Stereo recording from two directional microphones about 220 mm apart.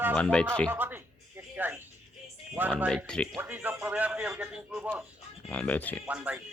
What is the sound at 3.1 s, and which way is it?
Speech, centre (ahead or behind).